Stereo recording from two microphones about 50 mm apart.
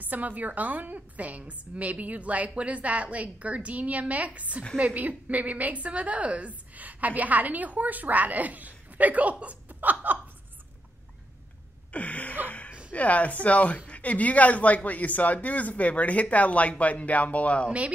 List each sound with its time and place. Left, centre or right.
0.0 s a woman's voice: right
11.9 s speech: left
12.4 s a sound: left
12.9 s speech: left
17.6 s a woman's voice: right